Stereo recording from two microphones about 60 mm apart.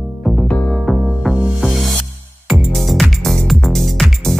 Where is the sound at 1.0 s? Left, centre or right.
Centre.